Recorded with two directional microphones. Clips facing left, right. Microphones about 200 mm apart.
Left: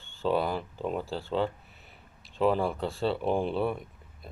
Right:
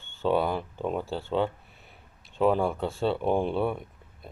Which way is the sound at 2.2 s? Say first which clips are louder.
Right 2 dB; 50° right (ahead or behind).